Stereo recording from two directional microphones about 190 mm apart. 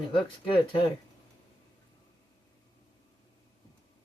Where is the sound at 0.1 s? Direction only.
25° left (ahead or behind).